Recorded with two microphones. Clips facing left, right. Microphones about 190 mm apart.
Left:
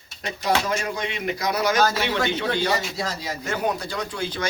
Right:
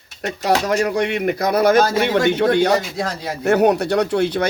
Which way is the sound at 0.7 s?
70° right (ahead or behind).